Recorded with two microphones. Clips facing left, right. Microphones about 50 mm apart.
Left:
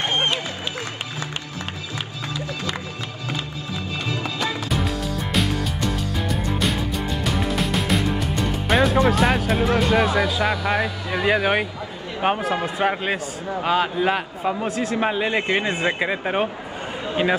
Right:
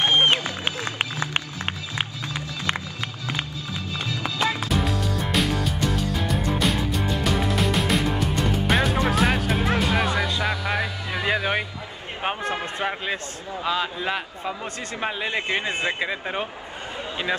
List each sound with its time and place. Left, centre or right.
0.3 s a sound: right
2.0 s music: right
4.2 s music: right
5.3 s music: centre
9.8 s a man's voice: centre
13.6 s a man's voice: left